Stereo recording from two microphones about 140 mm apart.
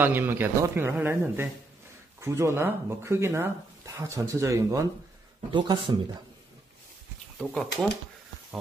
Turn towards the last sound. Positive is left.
turn(degrees=5)  # may be behind; listen again after turning